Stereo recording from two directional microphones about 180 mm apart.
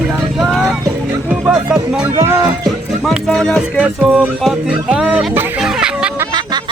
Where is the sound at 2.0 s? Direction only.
15° right (ahead or behind).